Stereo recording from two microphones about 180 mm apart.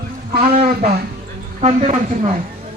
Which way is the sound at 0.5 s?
45° right (ahead or behind).